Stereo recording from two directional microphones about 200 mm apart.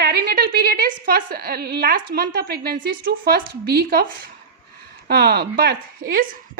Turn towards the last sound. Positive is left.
turn(degrees=-45)  # may be behind; listen again after turning